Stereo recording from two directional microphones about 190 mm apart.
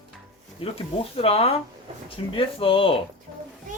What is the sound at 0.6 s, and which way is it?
Speech, 30° left (ahead or behind).